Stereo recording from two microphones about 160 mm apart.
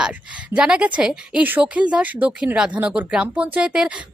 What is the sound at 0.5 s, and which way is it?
A woman's voice, 5° right (ahead or behind).